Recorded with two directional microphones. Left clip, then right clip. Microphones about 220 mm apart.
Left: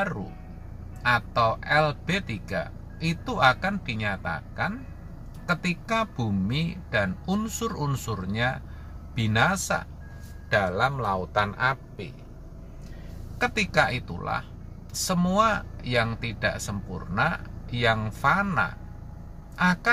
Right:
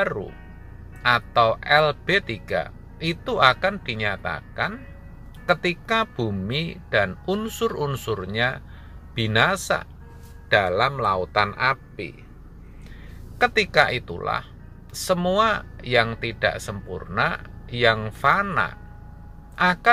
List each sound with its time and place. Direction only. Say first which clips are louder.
1.0 s speech: right 4 dB; 20° right (ahead or behind)
13.4 s speech: right 5 dB; 15° right (ahead or behind)